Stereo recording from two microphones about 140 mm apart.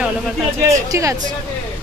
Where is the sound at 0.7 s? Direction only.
20° right (ahead or behind).